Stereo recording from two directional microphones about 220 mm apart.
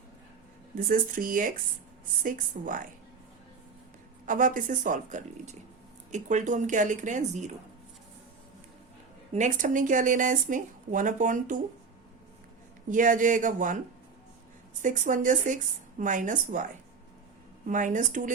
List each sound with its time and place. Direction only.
0.9 s speech: 40° right (ahead or behind)
4.3 s speech: 35° right (ahead or behind)
9.3 s speech: 35° right (ahead or behind)
12.9 s speech: 35° right (ahead or behind)
14.8 s speech: 35° right (ahead or behind)
17.7 s speech: 35° right (ahead or behind)